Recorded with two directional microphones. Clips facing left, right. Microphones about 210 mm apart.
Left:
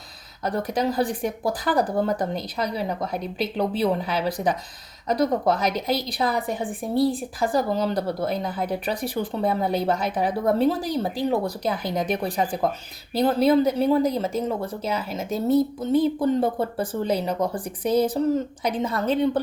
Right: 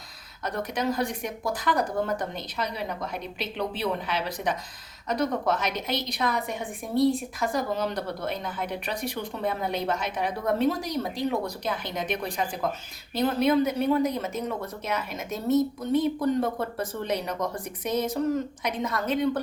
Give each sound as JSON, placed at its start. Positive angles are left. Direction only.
{"t": 0.4, "sound": "a woman's voice", "side_deg": 35}